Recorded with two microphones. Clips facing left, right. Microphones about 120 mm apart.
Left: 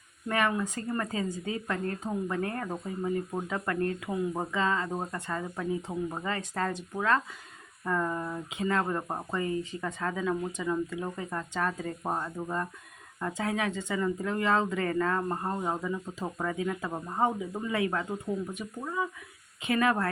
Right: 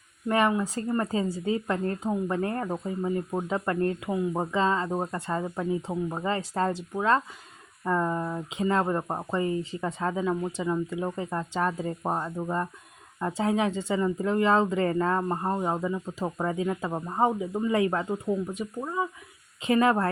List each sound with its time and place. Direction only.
0.3 s speech: 30° right (ahead or behind)